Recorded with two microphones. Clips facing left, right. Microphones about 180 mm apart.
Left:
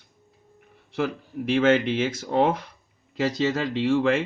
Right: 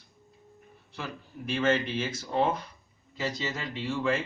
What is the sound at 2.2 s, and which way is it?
A man's voice, 70° left (ahead or behind).